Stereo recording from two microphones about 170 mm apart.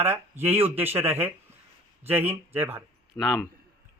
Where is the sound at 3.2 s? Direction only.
10° left (ahead or behind).